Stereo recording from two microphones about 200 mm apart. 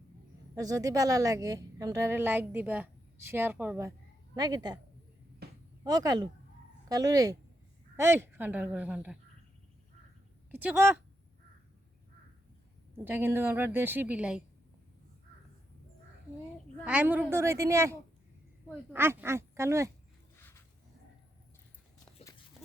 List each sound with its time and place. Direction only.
0.5 s a woman's voice: 15° right (ahead or behind)
5.4 s a sound: 55° right (ahead or behind)
5.8 s a woman's voice: 20° right (ahead or behind)
10.6 s a woman's voice: 10° right (ahead or behind)
13.1 s a woman's voice: 10° right (ahead or behind)
16.8 s a woman's voice: 5° right (ahead or behind)
20.3 s a sound: 10° left (ahead or behind)